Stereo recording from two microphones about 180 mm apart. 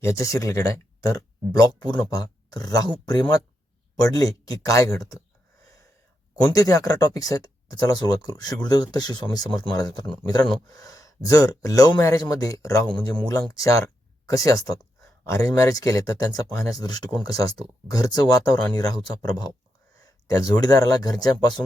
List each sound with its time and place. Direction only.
0.0 s speech: 15° left (ahead or behind)
6.5 s speech: 20° left (ahead or behind)